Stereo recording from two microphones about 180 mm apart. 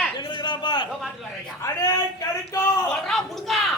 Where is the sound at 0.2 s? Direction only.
25° left (ahead or behind).